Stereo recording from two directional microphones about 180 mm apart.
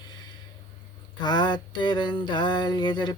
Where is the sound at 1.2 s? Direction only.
25° left (ahead or behind).